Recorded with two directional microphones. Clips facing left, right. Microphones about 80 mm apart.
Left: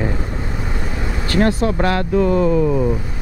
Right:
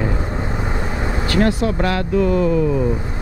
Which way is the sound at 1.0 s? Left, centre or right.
Right.